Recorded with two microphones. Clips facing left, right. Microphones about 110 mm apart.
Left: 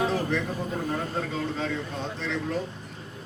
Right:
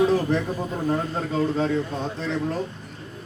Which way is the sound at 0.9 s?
40° right (ahead or behind).